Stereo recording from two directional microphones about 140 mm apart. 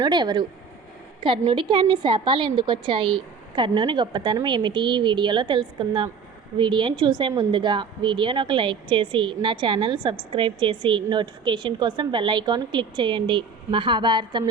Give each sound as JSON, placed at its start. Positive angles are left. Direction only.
{"t": 0.0, "sound": "a woman's voice", "side_deg": -30}